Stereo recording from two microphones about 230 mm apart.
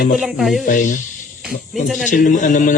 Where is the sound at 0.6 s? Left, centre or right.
Left.